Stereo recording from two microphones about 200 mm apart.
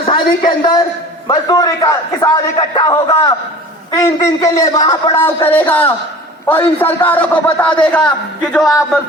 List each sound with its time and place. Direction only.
0.0 s a man's voice: 25° left (ahead or behind); by 9.0 s centre (ahead or behind)